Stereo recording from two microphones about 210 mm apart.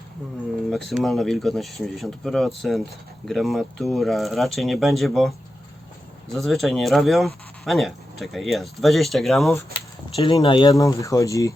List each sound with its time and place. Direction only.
0.7 s speech: centre (ahead or behind)
6.3 s speech: centre (ahead or behind)
10.2 s speech: 25° left (ahead or behind)